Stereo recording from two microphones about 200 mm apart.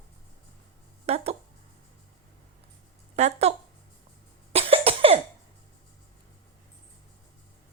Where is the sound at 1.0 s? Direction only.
30° right (ahead or behind).